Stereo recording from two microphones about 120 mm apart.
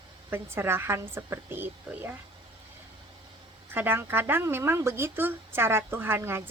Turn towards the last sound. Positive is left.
turn(degrees=-20)  # may be behind; listen again after turning